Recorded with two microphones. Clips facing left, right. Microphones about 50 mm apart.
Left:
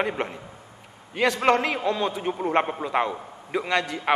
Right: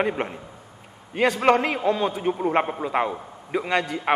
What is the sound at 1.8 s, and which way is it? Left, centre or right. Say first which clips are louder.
Speech: right 2 dB; centre.